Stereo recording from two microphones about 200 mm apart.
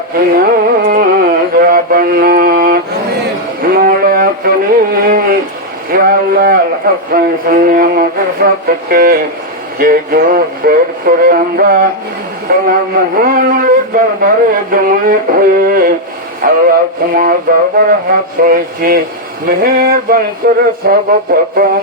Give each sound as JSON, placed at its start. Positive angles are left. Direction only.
{"t": 0.3, "sound": "music", "side_deg": -50}
{"t": 3.6, "sound": "a sound", "side_deg": -50}
{"t": 5.9, "sound": "a man's voice", "side_deg": -45}
{"t": 18.4, "sound": "a man's voice", "side_deg": -45}